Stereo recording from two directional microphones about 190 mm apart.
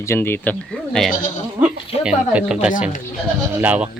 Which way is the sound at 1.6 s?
5° right (ahead or behind).